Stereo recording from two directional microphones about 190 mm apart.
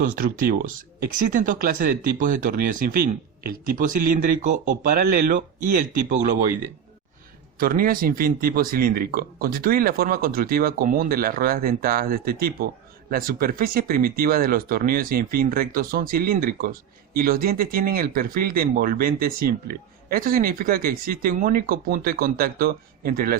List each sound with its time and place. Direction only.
0.0 s speech: 45° right (ahead or behind)
7.6 s speech: 50° right (ahead or behind)